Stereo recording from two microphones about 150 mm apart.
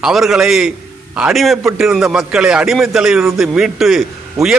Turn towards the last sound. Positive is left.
turn(degrees=0)  # may be behind; listen again after turning